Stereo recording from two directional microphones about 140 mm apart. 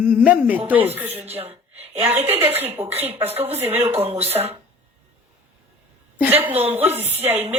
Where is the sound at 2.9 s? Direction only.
45° right (ahead or behind).